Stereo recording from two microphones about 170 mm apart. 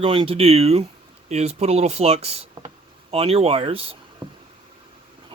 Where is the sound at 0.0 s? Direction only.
35° right (ahead or behind).